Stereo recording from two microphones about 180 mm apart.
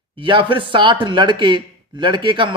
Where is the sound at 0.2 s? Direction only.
25° right (ahead or behind).